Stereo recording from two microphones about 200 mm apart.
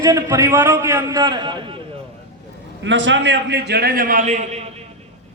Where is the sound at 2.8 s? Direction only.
65° right (ahead or behind); by 4.7 s 30° right (ahead or behind).